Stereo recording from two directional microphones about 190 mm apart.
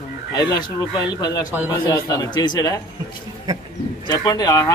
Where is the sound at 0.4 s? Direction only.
20° left (ahead or behind).